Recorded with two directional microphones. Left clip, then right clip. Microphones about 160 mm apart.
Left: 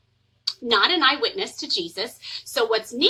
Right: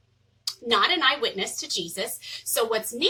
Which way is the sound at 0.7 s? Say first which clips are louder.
Left 2 dB; 20° left (ahead or behind).